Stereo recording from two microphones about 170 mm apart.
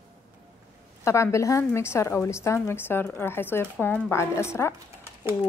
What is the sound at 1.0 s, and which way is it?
A woman's voice, 15° left (ahead or behind).